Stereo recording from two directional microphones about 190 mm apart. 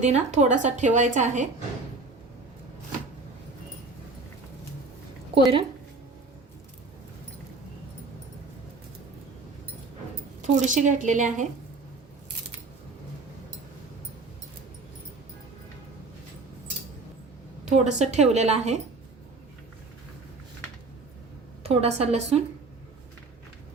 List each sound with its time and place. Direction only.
0.0 s a woman's voice: 35° right (ahead or behind)
5.3 s speech: 30° right (ahead or behind)
10.4 s a woman's voice: 40° right (ahead or behind)
17.7 s a woman's voice: 40° right (ahead or behind)
21.6 s a woman's voice: 30° right (ahead or behind)